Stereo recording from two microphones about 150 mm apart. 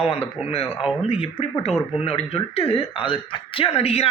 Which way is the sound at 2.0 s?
40° left (ahead or behind).